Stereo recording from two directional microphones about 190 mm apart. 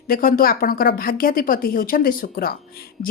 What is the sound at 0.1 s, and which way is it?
A woman's voice, 50° left (ahead or behind).